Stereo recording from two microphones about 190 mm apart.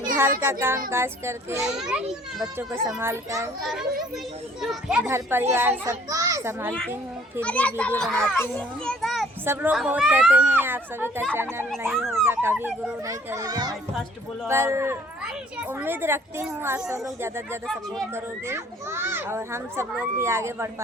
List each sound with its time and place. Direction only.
0.2 s speech: 15° right (ahead or behind)
1.6 s a child's voice: centre (ahead or behind)
2.8 s speech: 15° right (ahead or behind)
3.6 s a child's voice: centre (ahead or behind)
7.4 s a child's voice: 5° left (ahead or behind)
9.4 s speech: 10° right (ahead or behind)